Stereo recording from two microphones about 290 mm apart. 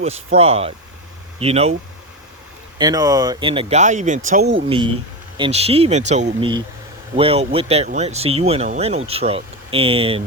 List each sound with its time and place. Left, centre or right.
0.0 s speech: right
2.7 s speech: centre; by 4.5 s right
4.5 s speech: centre